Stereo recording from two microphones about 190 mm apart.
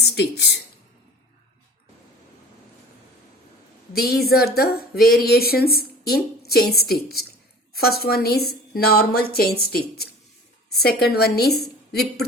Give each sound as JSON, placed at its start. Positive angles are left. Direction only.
{"t": 0.2, "sound": "a woman's voice", "side_deg": 65}
{"t": 3.9, "sound": "a sound", "side_deg": 55}
{"t": 5.2, "sound": "a woman's voice", "side_deg": 55}